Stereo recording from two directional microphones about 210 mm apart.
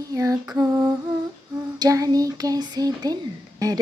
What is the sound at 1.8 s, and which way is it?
Music, 15° right (ahead or behind).